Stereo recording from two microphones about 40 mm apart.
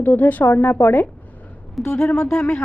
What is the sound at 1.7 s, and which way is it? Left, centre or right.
Speech, centre.